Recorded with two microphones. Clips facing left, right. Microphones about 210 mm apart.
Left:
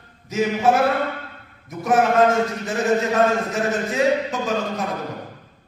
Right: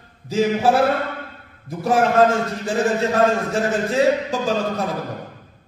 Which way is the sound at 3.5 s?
30° right (ahead or behind).